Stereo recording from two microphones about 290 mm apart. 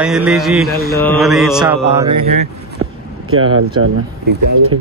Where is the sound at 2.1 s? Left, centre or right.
Right.